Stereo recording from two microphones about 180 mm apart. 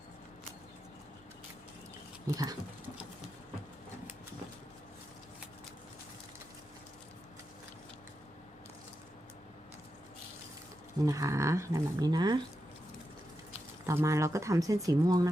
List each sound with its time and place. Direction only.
2.3 s patter: 20° right (ahead or behind)
11.0 s speech: 20° right (ahead or behind)
13.8 s speech: 15° right (ahead or behind)